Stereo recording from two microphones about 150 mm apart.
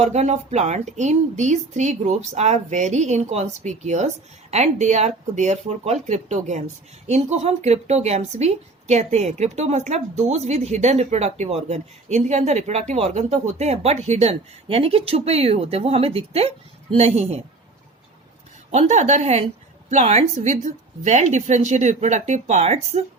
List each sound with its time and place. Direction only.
0.0 s a woman's voice: 50° right (ahead or behind)
18.7 s a woman's voice: 50° right (ahead or behind)